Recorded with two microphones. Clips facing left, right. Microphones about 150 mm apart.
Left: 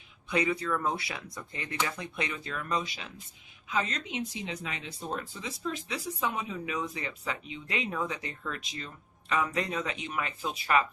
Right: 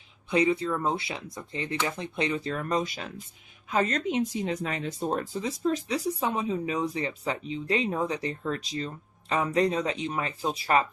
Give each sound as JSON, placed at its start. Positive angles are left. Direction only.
{"t": 0.3, "sound": "speech", "side_deg": -25}